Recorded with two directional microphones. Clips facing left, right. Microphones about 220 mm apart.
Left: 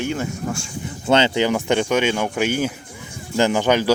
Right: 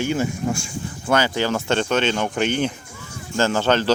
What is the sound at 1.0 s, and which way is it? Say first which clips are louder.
Speech: left 3 dB; 25° left (ahead or behind).